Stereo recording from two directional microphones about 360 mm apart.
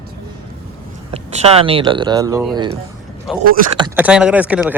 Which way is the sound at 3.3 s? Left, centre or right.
Centre.